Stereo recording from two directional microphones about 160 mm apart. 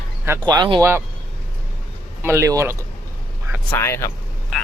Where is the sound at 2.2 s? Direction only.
15° right (ahead or behind).